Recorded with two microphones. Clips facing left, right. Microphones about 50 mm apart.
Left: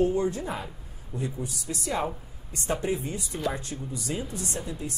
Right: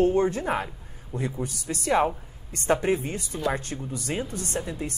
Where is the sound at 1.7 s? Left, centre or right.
Right.